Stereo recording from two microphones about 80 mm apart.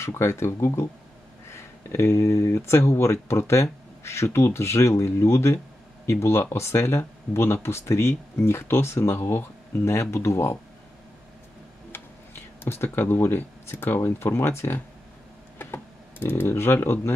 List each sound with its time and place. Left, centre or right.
0.0 s speech: left
12.6 s speech: left